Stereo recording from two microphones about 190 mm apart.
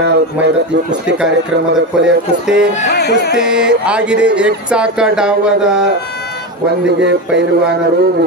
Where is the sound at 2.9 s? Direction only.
60° left (ahead or behind).